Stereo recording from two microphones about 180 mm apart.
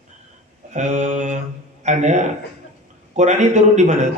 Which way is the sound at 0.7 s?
40° right (ahead or behind).